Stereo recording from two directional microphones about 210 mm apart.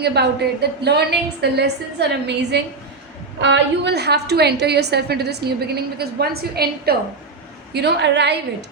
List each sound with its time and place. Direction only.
0.0 s a woman's voice: 50° right (ahead or behind)